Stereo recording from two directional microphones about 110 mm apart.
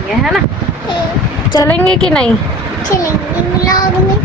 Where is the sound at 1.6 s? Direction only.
10° left (ahead or behind).